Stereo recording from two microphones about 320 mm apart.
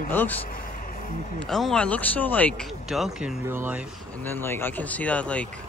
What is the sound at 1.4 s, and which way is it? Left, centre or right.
Speech, centre.